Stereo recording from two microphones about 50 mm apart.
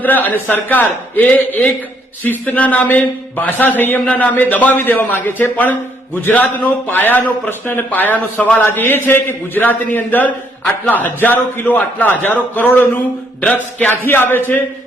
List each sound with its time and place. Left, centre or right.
0.0 s a man's voice: left
4.0 s a man's voice: left
13.4 s speech: left
13.9 s speech: left